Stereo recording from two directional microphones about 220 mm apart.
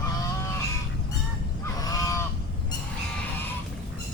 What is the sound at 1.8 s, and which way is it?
Goose, 15° left (ahead or behind).